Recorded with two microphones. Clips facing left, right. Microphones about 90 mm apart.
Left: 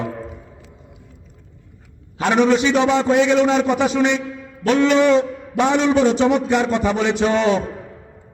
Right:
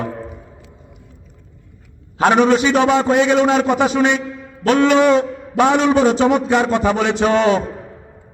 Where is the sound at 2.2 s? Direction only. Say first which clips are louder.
Right 3 dB; 60° right (ahead or behind).